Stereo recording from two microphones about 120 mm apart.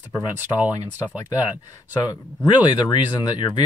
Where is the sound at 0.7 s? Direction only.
30° left (ahead or behind).